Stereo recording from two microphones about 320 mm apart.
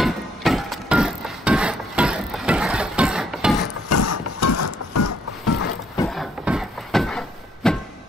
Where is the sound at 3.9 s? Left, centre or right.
Left.